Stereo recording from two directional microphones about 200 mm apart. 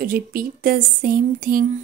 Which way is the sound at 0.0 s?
45° right (ahead or behind).